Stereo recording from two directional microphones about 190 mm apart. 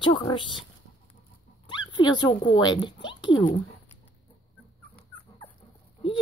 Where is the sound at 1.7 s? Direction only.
25° left (ahead or behind).